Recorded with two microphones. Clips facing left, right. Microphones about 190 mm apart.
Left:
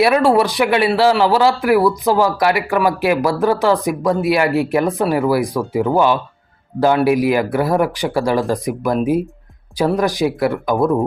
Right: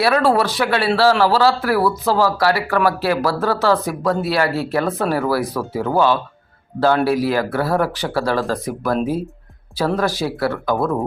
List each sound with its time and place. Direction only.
0.0 s speech: 15° left (ahead or behind)